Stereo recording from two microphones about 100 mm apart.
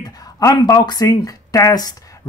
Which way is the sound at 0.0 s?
35° left (ahead or behind).